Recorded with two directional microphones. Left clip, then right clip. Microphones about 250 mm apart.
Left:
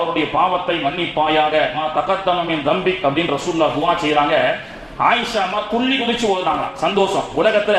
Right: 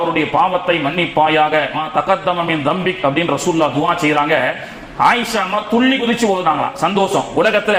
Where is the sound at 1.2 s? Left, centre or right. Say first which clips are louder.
Right 2 dB; right.